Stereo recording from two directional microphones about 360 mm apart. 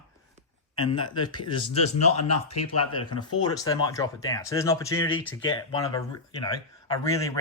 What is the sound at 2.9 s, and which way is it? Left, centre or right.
Speech, centre.